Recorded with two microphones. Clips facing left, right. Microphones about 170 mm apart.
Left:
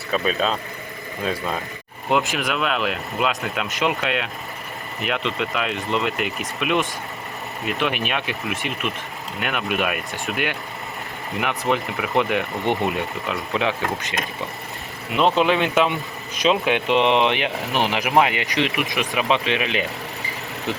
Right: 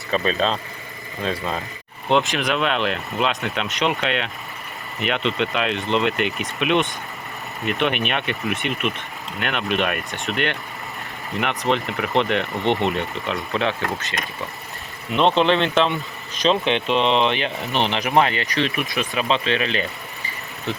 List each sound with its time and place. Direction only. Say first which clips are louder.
0.1 s speech: right 1 dB; 5° left (ahead or behind)
15.1 s speech: right 1 dB; 5° left (ahead or behind)